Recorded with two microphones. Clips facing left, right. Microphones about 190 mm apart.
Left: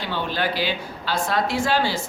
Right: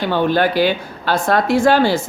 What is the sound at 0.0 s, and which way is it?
A woman's voice, 50° right (ahead or behind).